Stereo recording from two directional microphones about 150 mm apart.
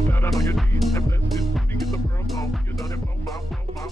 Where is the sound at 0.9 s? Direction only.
20° left (ahead or behind).